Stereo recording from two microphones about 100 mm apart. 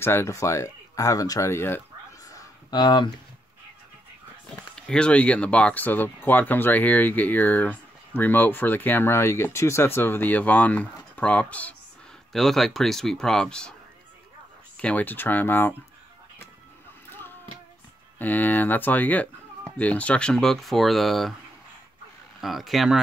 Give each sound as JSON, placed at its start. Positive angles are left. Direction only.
{"t": 0.0, "sound": "speech", "side_deg": 25}
{"t": 1.5, "sound": "speech", "side_deg": 25}
{"t": 2.3, "sound": "a sound", "side_deg": 45}
{"t": 4.7, "sound": "speech", "side_deg": 10}
{"t": 12.3, "sound": "speech", "side_deg": 5}
{"t": 14.8, "sound": "speech", "side_deg": 15}
{"t": 18.2, "sound": "speech", "side_deg": 20}
{"t": 22.4, "sound": "speech", "side_deg": 0}